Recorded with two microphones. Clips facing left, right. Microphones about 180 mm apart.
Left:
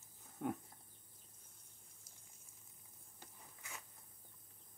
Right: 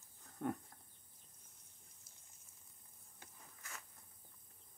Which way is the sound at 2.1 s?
45° left (ahead or behind).